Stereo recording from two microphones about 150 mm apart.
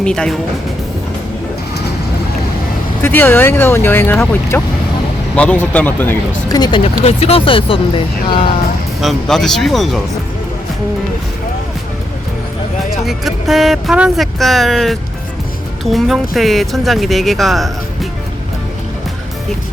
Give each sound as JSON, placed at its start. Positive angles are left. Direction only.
{"t": 0.0, "sound": "speech", "side_deg": 5}
{"t": 3.0, "sound": "speech", "side_deg": 15}
{"t": 6.5, "sound": "speech", "side_deg": 30}
{"t": 9.0, "sound": "speech", "side_deg": 0}
{"t": 13.1, "sound": "speech", "side_deg": 0}